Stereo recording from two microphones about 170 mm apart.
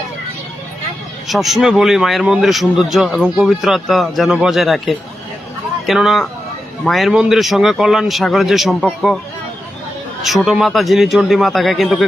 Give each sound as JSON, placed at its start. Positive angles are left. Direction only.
{"t": 1.3, "sound": "a man's voice", "side_deg": 0}
{"t": 10.4, "sound": "a man's voice", "side_deg": 0}